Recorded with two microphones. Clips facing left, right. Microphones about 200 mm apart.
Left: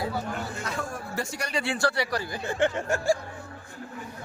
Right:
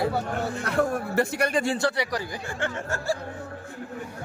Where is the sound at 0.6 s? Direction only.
60° right (ahead or behind).